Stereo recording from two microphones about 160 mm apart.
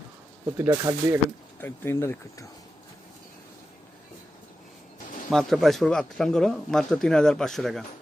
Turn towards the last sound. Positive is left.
turn(degrees=0)  # may be behind; listen again after turning